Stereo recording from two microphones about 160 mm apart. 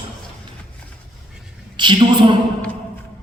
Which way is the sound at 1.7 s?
30° right (ahead or behind).